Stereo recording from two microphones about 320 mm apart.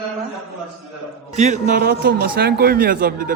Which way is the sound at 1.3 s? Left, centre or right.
Right.